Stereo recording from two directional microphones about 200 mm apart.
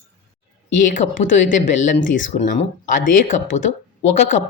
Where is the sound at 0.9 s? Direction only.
40° left (ahead or behind).